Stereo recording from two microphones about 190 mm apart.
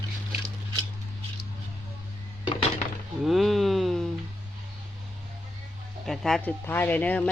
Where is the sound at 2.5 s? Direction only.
30° left (ahead or behind).